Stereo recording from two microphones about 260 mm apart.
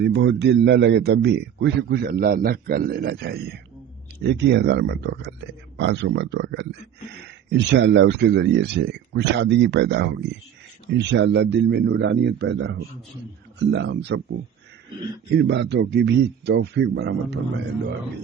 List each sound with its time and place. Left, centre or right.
0.0 s speech: right
15.3 s speech: right